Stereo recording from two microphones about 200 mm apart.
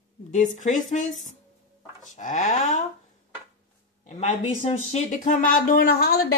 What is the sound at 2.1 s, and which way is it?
Speech, 40° left (ahead or behind).